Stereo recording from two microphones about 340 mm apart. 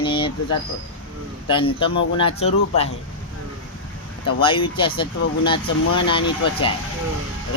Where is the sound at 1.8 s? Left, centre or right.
Centre.